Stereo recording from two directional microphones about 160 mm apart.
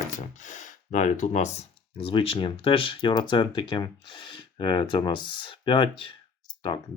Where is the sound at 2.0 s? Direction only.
35° left (ahead or behind).